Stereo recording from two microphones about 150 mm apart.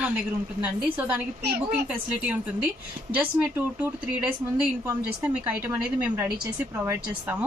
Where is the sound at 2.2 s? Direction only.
10° right (ahead or behind).